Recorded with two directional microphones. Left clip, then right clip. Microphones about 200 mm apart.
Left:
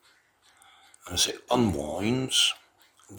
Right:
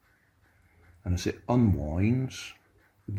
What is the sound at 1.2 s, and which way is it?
Speech, 55° left (ahead or behind).